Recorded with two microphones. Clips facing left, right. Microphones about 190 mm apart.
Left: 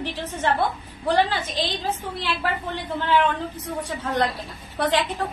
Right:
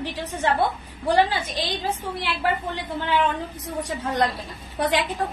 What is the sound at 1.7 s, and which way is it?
Speech, 15° right (ahead or behind).